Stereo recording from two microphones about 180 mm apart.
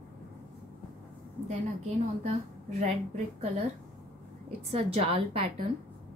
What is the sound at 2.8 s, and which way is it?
Speech, 35° right (ahead or behind).